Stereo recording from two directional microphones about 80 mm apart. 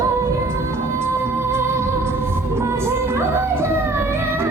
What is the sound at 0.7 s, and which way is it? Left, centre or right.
Music, right.